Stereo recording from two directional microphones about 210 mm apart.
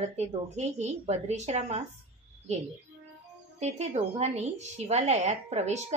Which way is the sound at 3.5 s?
30° right (ahead or behind).